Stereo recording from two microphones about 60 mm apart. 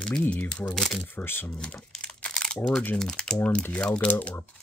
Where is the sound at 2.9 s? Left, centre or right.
Centre.